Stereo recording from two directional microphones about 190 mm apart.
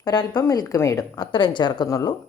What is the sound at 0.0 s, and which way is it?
A woman's voice, 25° left (ahead or behind).